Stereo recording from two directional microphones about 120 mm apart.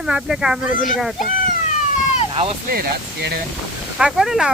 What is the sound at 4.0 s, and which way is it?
Speech, 5° right (ahead or behind).